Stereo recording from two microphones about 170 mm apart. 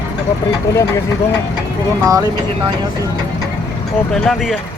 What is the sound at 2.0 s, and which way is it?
Speech, 20° right (ahead or behind).